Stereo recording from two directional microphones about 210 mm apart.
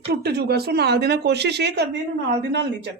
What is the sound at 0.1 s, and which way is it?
Speech, 50° right (ahead or behind).